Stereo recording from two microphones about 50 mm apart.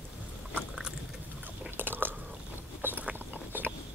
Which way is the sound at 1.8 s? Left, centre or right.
Right.